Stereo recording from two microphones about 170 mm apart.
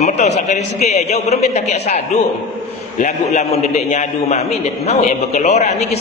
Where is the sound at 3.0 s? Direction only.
40° left (ahead or behind).